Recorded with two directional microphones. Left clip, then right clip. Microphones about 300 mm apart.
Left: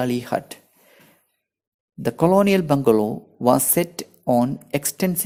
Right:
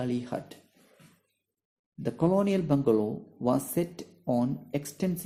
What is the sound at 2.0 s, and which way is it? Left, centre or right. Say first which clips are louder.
Speech: left 10 dB; left.